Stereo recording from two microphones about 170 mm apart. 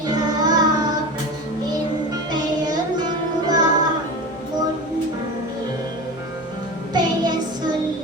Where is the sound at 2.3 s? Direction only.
25° right (ahead or behind).